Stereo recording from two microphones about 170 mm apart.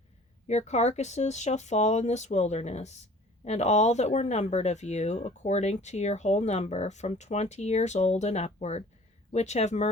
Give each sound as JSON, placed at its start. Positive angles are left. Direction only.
{"t": 0.4, "sound": "speech", "side_deg": 40}